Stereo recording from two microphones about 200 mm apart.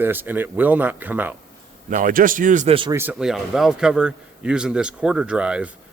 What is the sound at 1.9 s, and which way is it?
Speech, 45° right (ahead or behind).